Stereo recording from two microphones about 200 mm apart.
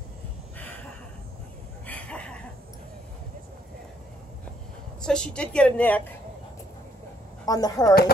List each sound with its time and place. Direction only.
1.9 s a sound: 5° left (ahead or behind)
5.0 s speech: 5° left (ahead or behind)
7.4 s speech: 20° left (ahead or behind)